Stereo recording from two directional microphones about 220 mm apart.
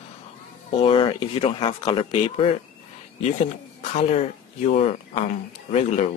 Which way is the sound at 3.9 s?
30° left (ahead or behind).